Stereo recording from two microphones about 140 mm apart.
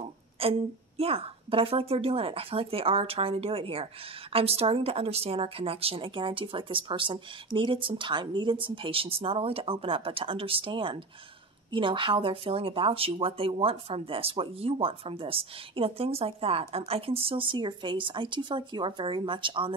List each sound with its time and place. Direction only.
0.4 s a woman's voice: 45° right (ahead or behind)